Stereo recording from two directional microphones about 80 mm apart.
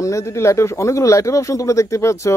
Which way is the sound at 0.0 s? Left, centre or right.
Left.